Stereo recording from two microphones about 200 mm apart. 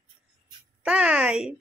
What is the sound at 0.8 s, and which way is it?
Speech, 5° right (ahead or behind).